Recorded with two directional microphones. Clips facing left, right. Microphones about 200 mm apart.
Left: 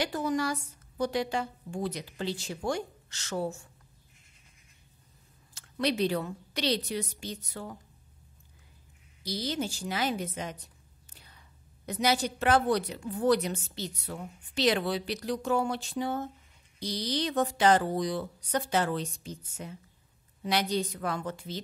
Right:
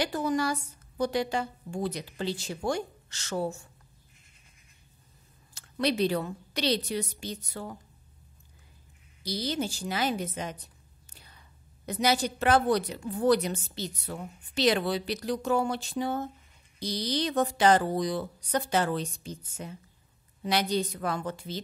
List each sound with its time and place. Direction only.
0.0 s a woman's voice: 35° right (ahead or behind)
5.5 s a woman's voice: 35° right (ahead or behind)
9.2 s a woman's voice: 35° right (ahead or behind)
11.8 s a woman's voice: 35° right (ahead or behind)